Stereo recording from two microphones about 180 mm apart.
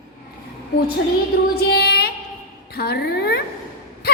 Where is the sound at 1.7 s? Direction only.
65° left (ahead or behind).